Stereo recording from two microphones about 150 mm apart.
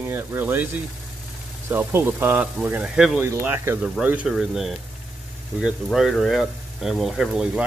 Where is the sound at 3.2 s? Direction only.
15° right (ahead or behind).